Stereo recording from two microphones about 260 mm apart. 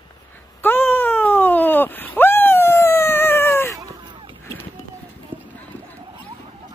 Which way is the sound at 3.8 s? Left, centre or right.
Centre.